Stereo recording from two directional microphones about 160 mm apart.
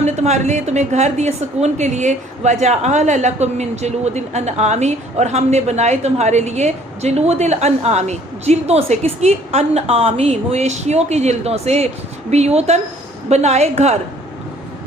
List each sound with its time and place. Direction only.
0.0 s a woman's voice: 45° right (ahead or behind)